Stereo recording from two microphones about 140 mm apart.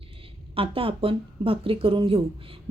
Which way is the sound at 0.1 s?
40° right (ahead or behind).